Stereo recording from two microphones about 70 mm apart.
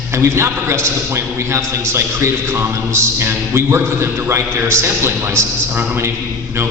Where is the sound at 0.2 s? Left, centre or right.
Right.